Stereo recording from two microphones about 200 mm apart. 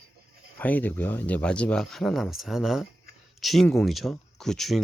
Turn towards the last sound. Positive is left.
turn(degrees=0)  # may be behind; listen again after turning